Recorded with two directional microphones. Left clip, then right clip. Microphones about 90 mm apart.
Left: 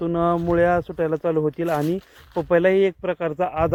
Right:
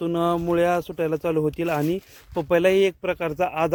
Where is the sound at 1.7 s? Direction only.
35° right (ahead or behind).